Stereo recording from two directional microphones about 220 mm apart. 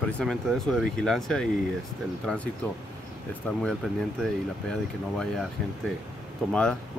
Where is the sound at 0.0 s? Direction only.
Centre (ahead or behind).